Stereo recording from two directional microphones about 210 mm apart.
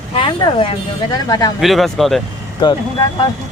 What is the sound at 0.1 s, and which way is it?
Speech, 25° left (ahead or behind).